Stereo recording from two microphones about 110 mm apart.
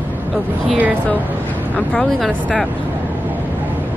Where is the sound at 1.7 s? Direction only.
5° left (ahead or behind).